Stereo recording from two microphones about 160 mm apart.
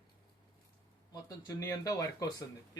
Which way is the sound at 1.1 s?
25° left (ahead or behind).